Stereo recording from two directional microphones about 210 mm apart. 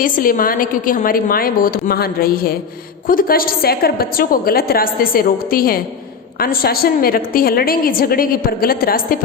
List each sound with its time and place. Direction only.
0.0 s a woman's voice: 40° left (ahead or behind)